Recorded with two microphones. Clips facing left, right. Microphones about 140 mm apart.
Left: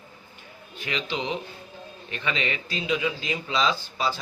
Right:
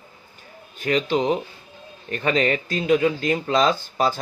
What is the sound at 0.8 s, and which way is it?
A man's voice, 45° right (ahead or behind).